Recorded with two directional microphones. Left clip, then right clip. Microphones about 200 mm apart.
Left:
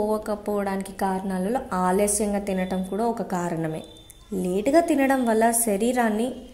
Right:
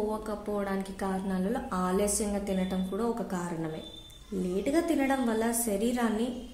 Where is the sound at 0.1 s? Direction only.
35° left (ahead or behind).